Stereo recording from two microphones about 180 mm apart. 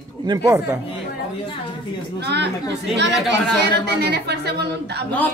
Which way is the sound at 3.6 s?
65° right (ahead or behind).